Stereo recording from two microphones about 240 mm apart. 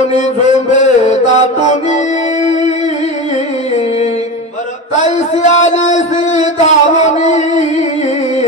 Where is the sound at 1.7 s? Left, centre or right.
Left.